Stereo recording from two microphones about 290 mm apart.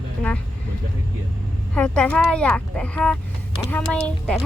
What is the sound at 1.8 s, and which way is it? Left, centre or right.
Speech, centre.